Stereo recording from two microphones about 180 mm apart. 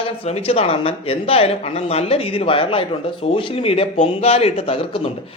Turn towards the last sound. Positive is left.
turn(degrees=35)  # may be behind; listen again after turning